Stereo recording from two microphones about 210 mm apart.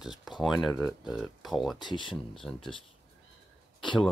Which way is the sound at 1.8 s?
25° left (ahead or behind).